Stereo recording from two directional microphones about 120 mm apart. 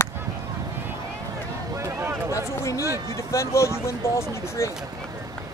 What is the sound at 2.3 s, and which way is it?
Speech, 25° left (ahead or behind).